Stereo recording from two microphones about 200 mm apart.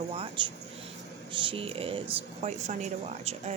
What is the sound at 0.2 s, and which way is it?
Speech, 25° right (ahead or behind).